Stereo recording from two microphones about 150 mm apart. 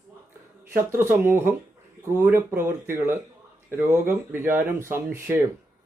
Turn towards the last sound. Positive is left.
turn(degrees=-15)  # may be behind; listen again after turning